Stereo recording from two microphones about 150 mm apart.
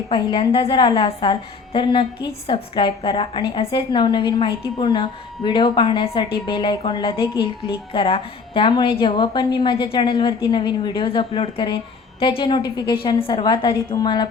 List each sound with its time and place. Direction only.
0.1 s a woman's voice: 35° left (ahead or behind)